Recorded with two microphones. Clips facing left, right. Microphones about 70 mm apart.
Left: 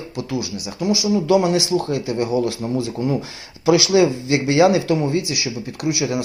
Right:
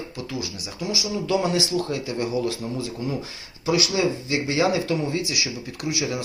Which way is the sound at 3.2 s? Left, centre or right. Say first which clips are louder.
Left 5 dB; left.